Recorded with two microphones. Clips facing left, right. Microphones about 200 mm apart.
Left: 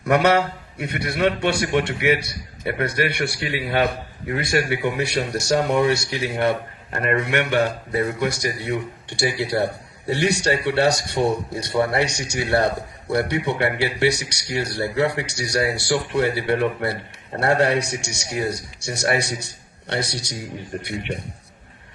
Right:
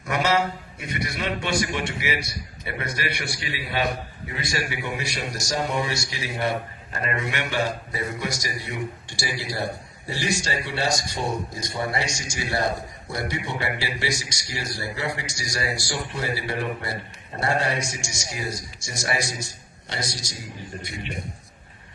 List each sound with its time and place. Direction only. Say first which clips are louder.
0.0 s a man's voice: left 6 dB; 60° left (ahead or behind)